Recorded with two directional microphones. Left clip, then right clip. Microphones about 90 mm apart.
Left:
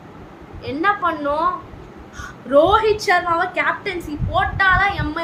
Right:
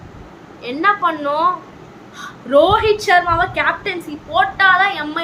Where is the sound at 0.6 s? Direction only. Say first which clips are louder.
Right 3 dB; 20° right (ahead or behind).